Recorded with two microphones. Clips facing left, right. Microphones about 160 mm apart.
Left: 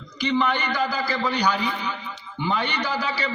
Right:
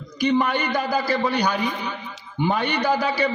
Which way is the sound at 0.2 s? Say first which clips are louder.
Right 3 dB; 50° right (ahead or behind).